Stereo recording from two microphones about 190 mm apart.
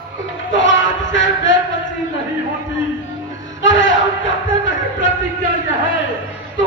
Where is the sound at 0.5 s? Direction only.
75° left (ahead or behind).